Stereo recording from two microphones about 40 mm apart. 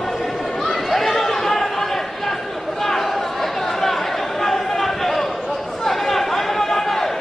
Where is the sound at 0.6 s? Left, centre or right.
Centre.